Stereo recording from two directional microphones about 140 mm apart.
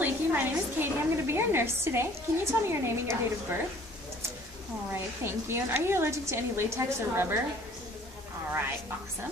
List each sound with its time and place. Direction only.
0.0 s a woman's voice: 15° right (ahead or behind)
4.9 s a woman's voice: 20° right (ahead or behind)